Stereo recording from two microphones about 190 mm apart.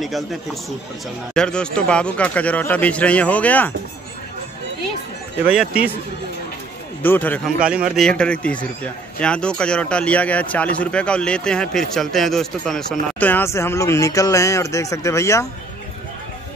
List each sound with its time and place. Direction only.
1.3 s speech: 5° left (ahead or behind)
7.0 s speech: 10° left (ahead or behind)
7.4 s a man's voice: 5° right (ahead or behind); by 15.4 s 15° left (ahead or behind)